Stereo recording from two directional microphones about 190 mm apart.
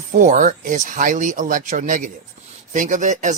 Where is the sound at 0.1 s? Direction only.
40° right (ahead or behind).